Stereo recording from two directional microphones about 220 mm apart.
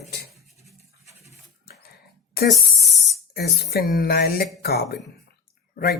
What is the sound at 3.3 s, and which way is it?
Speech, 45° left (ahead or behind).